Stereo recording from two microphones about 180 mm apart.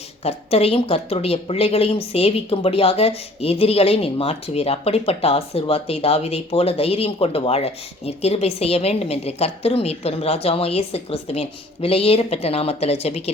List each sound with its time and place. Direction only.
0.2 s speech: 35° left (ahead or behind)